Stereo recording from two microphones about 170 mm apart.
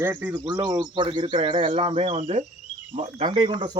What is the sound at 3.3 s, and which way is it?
Speech, 30° right (ahead or behind).